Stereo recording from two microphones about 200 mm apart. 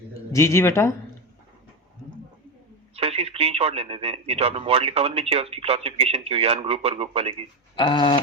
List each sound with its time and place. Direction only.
0.3 s speech: 15° left (ahead or behind)
2.9 s speech: 30° right (ahead or behind)
7.8 s a sound: 25° left (ahead or behind)